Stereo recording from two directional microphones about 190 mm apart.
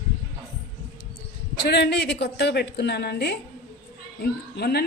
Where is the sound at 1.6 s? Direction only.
60° left (ahead or behind).